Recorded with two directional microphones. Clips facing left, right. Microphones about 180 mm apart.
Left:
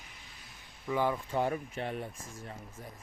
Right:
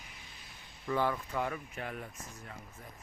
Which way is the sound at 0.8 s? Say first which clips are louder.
Left 1 dB; 15° left (ahead or behind).